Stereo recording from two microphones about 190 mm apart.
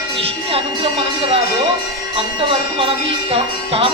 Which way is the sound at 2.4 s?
30° right (ahead or behind).